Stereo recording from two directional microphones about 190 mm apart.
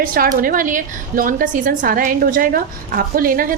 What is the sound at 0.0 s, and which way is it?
A woman's voice, 50° right (ahead or behind).